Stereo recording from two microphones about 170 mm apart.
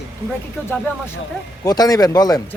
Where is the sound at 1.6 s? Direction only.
20° left (ahead or behind).